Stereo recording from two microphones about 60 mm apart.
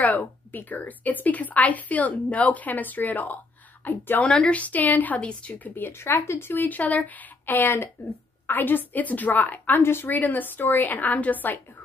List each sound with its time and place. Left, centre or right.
0.0 s a woman's voice: left
4.3 s a woman's voice: centre
5.8 s speech: left
10.1 s a woman's voice: left